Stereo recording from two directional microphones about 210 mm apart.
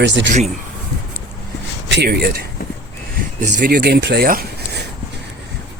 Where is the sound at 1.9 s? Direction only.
50° right (ahead or behind).